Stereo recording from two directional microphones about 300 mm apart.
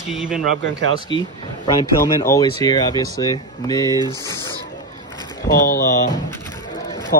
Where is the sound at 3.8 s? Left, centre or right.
Centre.